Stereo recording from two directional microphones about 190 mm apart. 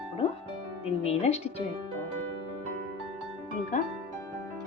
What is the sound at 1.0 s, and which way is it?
Speech, 35° left (ahead or behind).